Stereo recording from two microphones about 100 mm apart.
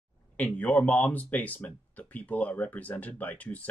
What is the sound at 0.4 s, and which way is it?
Speech, 15° left (ahead or behind).